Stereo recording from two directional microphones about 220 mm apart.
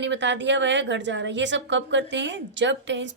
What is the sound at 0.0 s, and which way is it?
A woman's voice, 55° right (ahead or behind).